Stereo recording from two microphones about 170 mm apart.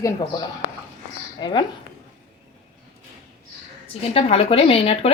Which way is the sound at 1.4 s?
25° left (ahead or behind).